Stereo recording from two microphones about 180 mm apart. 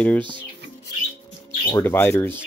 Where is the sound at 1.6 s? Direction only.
15° left (ahead or behind).